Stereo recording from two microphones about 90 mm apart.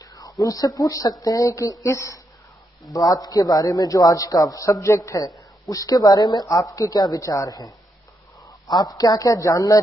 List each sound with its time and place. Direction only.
0.0 s a man's voice: 40° left (ahead or behind)
2.9 s a man's voice: 45° left (ahead or behind)